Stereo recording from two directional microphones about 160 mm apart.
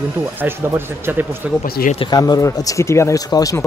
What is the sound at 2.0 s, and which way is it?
Speech, 25° left (ahead or behind).